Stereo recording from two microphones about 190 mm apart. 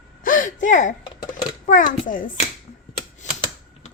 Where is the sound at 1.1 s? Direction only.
25° left (ahead or behind).